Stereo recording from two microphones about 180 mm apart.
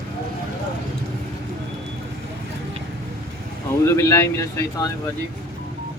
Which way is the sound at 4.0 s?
15° left (ahead or behind).